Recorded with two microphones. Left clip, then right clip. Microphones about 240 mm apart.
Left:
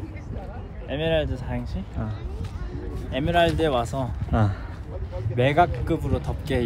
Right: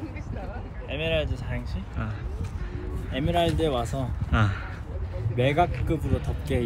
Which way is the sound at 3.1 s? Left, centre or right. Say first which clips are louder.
Left 4 dB; centre.